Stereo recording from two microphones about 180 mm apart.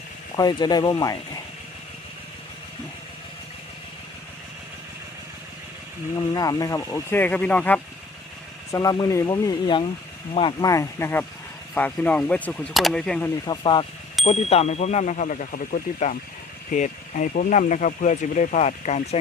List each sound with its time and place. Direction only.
0.3 s speech: 20° left (ahead or behind)
6.1 s speech: 20° left (ahead or behind)
8.7 s speech: 20° left (ahead or behind)
13.4 s speech: 25° left (ahead or behind); by 19.2 s 40° left (ahead or behind)